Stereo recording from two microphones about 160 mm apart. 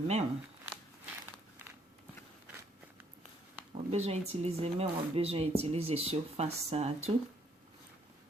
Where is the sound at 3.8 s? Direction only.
40° right (ahead or behind).